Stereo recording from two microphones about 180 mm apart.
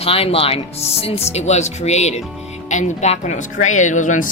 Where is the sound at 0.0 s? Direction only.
30° left (ahead or behind).